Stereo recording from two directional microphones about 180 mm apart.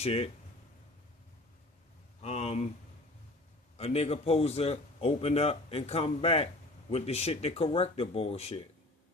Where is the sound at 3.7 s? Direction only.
35° left (ahead or behind).